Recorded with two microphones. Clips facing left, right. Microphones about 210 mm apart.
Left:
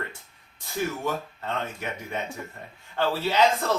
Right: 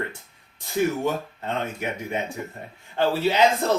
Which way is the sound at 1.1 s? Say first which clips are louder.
Right 3 dB; 20° right (ahead or behind).